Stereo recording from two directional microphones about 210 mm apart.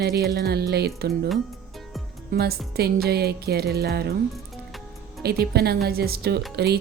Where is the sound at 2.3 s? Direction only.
50° right (ahead or behind).